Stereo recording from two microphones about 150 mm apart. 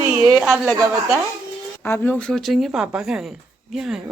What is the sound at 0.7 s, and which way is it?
Speech, 20° right (ahead or behind).